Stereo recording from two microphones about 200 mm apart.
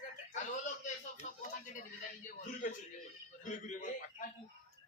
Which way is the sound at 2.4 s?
40° left (ahead or behind).